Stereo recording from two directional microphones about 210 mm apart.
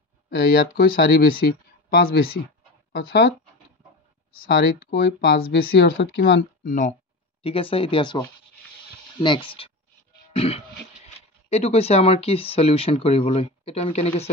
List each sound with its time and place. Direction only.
0.3 s speech: 45° left (ahead or behind)
4.4 s speech: 45° left (ahead or behind)
7.4 s speech: 25° left (ahead or behind)
10.3 s throat clearing: 30° left (ahead or behind)
11.4 s speech: 30° left (ahead or behind)